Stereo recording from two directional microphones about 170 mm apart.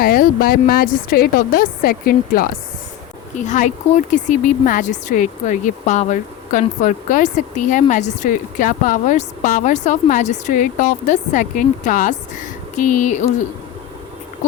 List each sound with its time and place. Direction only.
0.0 s a woman's voice: 60° left (ahead or behind)
3.3 s speech: 45° left (ahead or behind)